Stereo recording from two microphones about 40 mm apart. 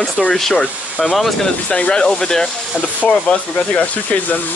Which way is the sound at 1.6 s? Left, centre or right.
Left.